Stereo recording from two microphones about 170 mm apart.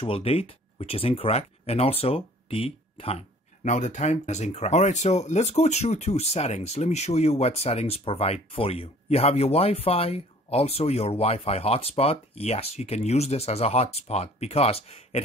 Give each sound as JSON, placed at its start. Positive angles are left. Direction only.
{"t": 0.0, "sound": "speech", "side_deg": 35}